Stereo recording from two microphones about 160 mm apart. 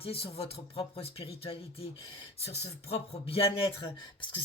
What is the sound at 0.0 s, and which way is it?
Speech, 35° left (ahead or behind).